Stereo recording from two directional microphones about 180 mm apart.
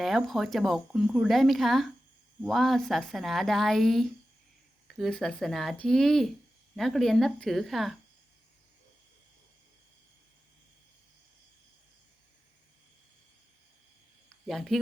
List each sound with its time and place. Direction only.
0.0 s speech: centre (ahead or behind)
14.4 s speech: centre (ahead or behind)